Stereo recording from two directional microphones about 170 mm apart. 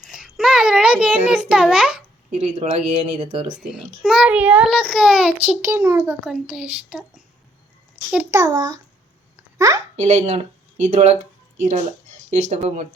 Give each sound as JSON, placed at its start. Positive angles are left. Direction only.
{"t": 0.0, "sound": "a sound", "side_deg": -5}
{"t": 2.4, "sound": "speech", "side_deg": -35}
{"t": 3.6, "sound": "a child's voice", "side_deg": -5}
{"t": 5.6, "sound": "a child's voice", "side_deg": -15}
{"t": 6.2, "sound": "a child's voice", "side_deg": -5}
{"t": 8.1, "sound": "a child's voice", "side_deg": -15}
{"t": 9.9, "sound": "speech", "side_deg": -40}
{"t": 12.3, "sound": "speech", "side_deg": -40}